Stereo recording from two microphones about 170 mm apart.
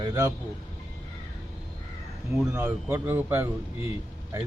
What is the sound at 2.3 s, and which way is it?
Speech, 15° right (ahead or behind).